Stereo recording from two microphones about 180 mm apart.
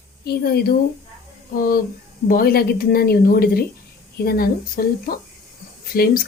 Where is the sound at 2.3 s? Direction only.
55° left (ahead or behind).